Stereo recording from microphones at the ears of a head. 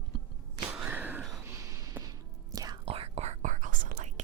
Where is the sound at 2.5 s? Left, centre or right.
Right.